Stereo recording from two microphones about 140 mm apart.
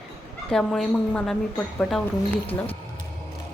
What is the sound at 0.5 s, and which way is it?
A woman's voice, 5° left (ahead or behind).